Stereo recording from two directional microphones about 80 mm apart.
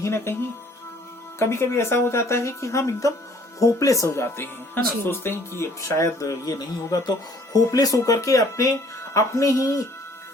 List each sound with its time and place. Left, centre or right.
0.0 s speech: left
1.4 s speech: left